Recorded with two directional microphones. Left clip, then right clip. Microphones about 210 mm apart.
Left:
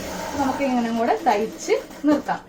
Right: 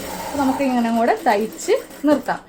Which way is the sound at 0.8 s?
50° right (ahead or behind).